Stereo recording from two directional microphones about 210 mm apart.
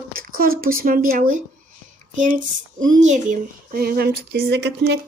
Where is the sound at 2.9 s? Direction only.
35° right (ahead or behind).